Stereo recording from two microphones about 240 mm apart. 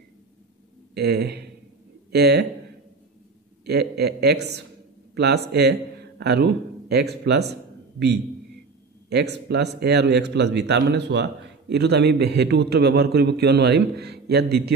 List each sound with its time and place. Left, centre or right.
0.9 s a man's voice: right
3.6 s a man's voice: right
9.1 s a man's voice: right